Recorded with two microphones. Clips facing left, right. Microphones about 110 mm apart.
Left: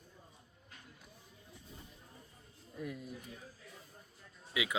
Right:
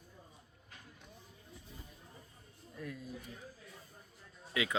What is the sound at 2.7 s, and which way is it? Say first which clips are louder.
Speech: left 2 dB; 20° left (ahead or behind).